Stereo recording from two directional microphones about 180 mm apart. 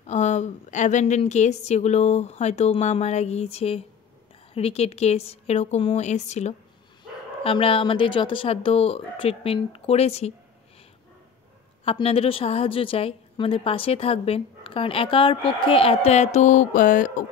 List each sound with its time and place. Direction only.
0.0 s a woman's voice: 40° left (ahead or behind)
11.8 s a woman's voice: 35° left (ahead or behind)